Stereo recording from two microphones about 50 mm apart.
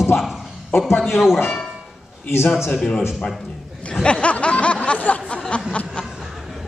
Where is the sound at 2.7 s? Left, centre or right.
Centre.